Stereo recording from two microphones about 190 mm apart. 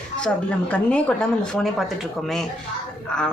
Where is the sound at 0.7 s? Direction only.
5° left (ahead or behind).